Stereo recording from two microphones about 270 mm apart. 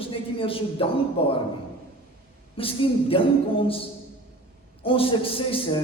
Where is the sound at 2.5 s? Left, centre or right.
Centre.